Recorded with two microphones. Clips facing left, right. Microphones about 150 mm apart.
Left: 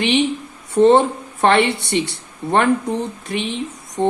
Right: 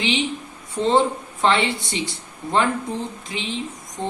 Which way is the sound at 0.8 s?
65° left (ahead or behind).